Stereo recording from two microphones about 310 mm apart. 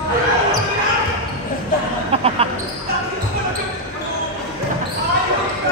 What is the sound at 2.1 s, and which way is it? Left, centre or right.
Speech, centre.